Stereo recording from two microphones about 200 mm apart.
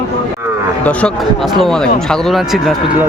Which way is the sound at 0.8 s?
5° left (ahead or behind).